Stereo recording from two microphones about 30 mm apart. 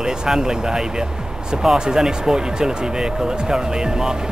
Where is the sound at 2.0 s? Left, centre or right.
Right.